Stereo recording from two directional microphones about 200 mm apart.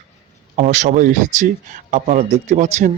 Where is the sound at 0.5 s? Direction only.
35° right (ahead or behind).